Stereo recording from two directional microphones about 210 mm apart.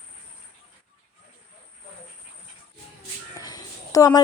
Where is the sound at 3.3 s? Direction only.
15° left (ahead or behind).